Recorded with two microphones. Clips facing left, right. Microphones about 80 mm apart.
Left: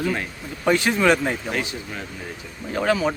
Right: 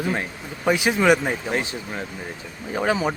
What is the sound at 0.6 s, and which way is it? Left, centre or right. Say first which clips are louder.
Speech: even; centre.